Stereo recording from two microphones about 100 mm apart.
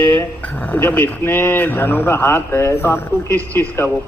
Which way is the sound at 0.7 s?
20° left (ahead or behind).